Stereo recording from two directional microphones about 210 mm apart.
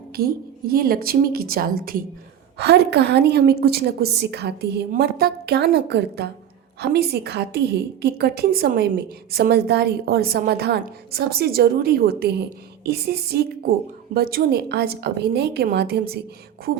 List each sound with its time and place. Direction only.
0.2 s a woman's voice: 45° right (ahead or behind)